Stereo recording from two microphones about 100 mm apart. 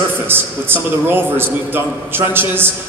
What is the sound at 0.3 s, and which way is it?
A man's voice, 20° right (ahead or behind).